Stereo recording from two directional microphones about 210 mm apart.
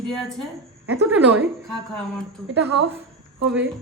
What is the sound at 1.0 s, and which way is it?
Speech, 5° right (ahead or behind).